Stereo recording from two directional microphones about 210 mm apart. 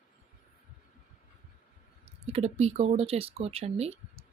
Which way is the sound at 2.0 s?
30° right (ahead or behind).